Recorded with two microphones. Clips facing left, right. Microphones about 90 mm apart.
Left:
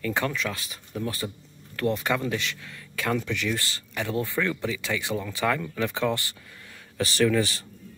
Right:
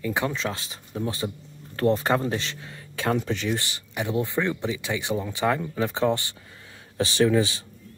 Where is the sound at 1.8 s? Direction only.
35° right (ahead or behind).